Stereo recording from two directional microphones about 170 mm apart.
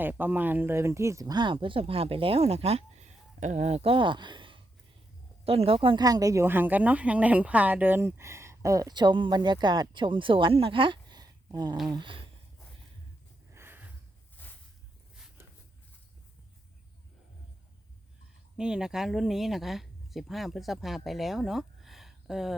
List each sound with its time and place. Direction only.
0.0 s speech: 10° right (ahead or behind); by 12.2 s 30° right (ahead or behind)
13.5 s snort: 15° right (ahead or behind)
14.4 s a sound: 10° left (ahead or behind)
18.5 s speech: 5° right (ahead or behind)